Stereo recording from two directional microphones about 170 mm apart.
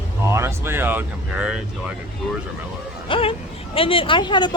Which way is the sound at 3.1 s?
30° left (ahead or behind).